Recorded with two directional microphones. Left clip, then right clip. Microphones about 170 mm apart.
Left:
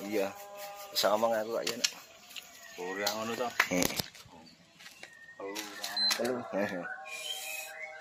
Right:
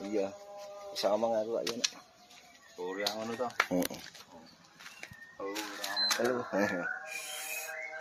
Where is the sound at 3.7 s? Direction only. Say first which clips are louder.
Left 2 dB; 15° right (ahead or behind).